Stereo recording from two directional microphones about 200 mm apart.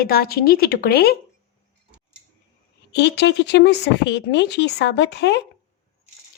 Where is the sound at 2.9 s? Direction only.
60° left (ahead or behind).